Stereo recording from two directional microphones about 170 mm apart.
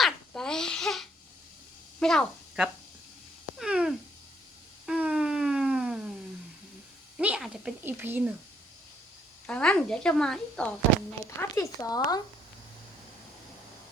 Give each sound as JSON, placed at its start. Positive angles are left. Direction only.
{"t": 0.0, "sound": "babbling", "side_deg": 5}
{"t": 2.0, "sound": "speech", "side_deg": 5}
{"t": 3.6, "sound": "cat", "side_deg": -5}
{"t": 4.9, "sound": "a sound", "side_deg": -5}
{"t": 7.2, "sound": "speech", "side_deg": -5}
{"t": 9.5, "sound": "speech", "side_deg": 5}
{"t": 11.3, "sound": "speech", "side_deg": 15}